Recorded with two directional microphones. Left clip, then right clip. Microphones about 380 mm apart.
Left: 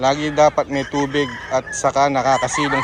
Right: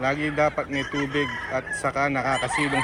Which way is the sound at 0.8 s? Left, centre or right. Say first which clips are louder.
Left 6 dB; left.